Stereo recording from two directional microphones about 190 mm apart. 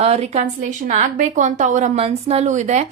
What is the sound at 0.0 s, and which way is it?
A woman's voice, 35° right (ahead or behind).